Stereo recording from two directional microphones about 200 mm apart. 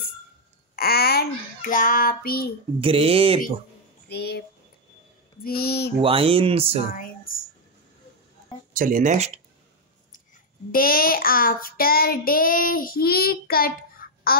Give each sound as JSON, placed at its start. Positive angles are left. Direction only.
{"t": 0.7, "sound": "child singing", "side_deg": 50}
{"t": 2.8, "sound": "speech", "side_deg": -30}
{"t": 4.1, "sound": "child singing", "side_deg": 55}
{"t": 5.4, "sound": "child singing", "side_deg": 50}
{"t": 5.9, "sound": "speech", "side_deg": -25}
{"t": 7.3, "sound": "a sound", "side_deg": 45}
{"t": 8.7, "sound": "speech", "side_deg": -40}
{"t": 10.7, "sound": "child singing", "side_deg": 45}